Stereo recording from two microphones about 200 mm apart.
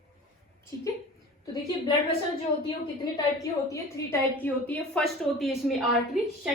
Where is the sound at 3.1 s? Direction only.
15° left (ahead or behind).